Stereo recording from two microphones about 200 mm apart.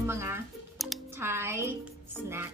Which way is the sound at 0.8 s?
Centre (ahead or behind).